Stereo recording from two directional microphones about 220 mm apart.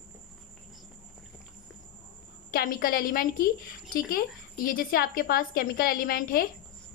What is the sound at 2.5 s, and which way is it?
A woman's voice, 40° left (ahead or behind).